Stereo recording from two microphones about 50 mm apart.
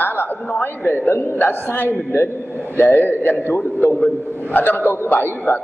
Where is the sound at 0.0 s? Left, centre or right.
Left.